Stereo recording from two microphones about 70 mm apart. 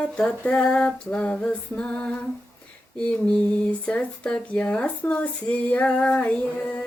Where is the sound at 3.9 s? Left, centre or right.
Centre.